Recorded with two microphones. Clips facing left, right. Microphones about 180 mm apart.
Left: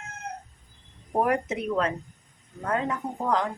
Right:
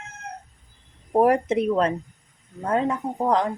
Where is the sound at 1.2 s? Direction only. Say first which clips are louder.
Right 9 dB; 35° right (ahead or behind).